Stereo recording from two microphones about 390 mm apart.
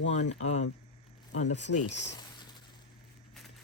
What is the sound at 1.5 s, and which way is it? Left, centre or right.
Speech, centre.